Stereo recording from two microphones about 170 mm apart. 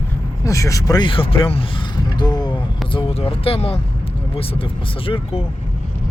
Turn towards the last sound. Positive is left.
turn(degrees=30)  # may be behind; listen again after turning